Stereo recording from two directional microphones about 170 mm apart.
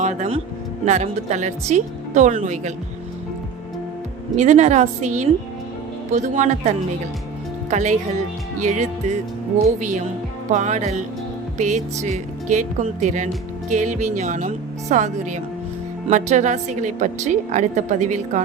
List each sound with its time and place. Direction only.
0.0 s speech: 45° right (ahead or behind)
4.4 s speech: 45° right (ahead or behind)
11.5 s music: 45° right (ahead or behind)
12.0 s speech: 45° right (ahead or behind)